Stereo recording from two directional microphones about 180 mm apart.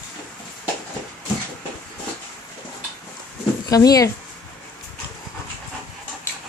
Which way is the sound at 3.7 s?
20° left (ahead or behind).